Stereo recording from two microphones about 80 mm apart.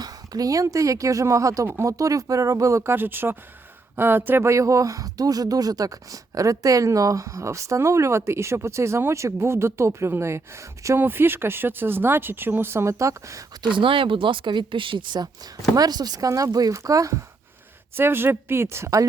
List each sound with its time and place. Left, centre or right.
0.0 s a woman's voice: right
1.6 s speech: right
1.9 s speech: right
2.9 s speech: right
13.7 s speech: right
15.7 s speech: right
17.9 s speech: right